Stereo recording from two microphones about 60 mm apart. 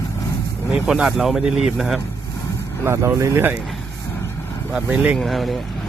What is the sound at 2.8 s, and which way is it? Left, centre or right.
Speech, right.